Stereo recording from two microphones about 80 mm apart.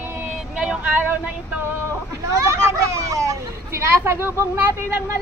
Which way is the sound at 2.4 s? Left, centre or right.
Right.